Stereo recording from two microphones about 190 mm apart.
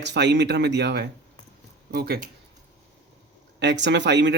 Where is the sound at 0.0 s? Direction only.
65° right (ahead or behind).